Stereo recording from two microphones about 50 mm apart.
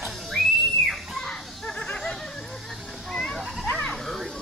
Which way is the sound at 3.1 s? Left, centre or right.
Centre.